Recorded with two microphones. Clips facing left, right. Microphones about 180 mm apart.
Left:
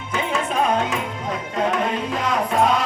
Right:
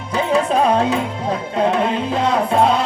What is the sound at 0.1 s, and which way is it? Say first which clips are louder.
Music: right 7 dB; 35° right (ahead or behind).